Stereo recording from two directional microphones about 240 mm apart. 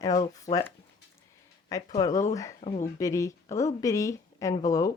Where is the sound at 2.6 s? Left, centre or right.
Left.